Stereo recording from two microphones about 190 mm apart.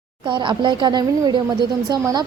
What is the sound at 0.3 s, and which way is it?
A woman's voice, 25° right (ahead or behind).